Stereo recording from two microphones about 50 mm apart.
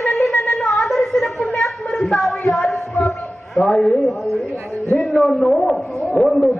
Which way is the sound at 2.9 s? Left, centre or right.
Centre.